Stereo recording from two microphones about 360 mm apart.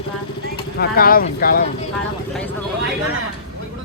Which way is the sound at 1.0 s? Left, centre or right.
Left.